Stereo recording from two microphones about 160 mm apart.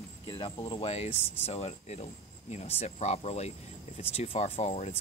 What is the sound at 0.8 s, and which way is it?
Speech, 40° left (ahead or behind).